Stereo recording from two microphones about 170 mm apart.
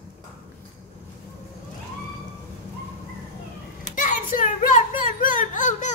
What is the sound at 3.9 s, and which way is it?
Hands, 50° left (ahead or behind).